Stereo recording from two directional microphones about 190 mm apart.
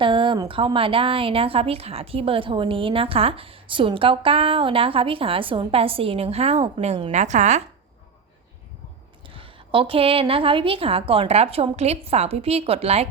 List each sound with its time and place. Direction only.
0.0 s speech: 25° right (ahead or behind)
9.3 s speech: 30° right (ahead or behind)